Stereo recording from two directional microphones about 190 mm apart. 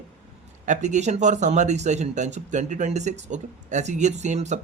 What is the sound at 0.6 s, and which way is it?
Speech, 40° right (ahead or behind).